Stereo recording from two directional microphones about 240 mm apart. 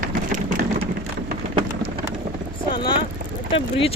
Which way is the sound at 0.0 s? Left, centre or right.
Right.